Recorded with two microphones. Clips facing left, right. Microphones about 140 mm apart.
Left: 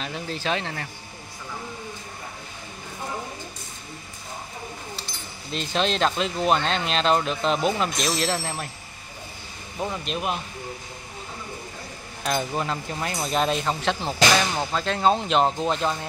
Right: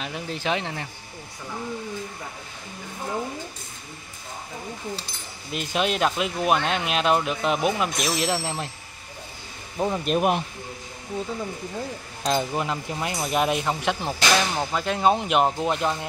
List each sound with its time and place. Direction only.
0.0 s speech: 15° right (ahead or behind)
5.5 s speech: 10° right (ahead or behind)
10.0 s speech: 50° right (ahead or behind)
12.3 s speech: 15° right (ahead or behind)